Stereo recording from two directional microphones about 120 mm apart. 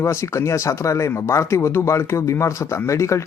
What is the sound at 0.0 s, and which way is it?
Speech, 25° left (ahead or behind).